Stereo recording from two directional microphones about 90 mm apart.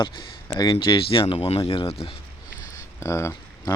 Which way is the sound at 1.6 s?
70° left (ahead or behind).